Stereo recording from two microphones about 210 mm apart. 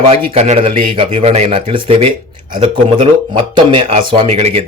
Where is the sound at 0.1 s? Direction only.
30° right (ahead or behind).